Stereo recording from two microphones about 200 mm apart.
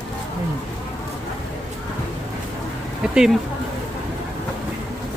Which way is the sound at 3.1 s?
5° right (ahead or behind).